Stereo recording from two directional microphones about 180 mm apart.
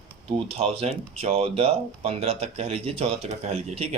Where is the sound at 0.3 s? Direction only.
35° right (ahead or behind).